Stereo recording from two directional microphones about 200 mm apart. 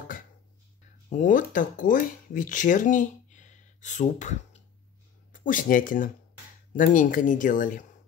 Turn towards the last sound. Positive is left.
turn(degrees=40)  # may be behind; listen again after turning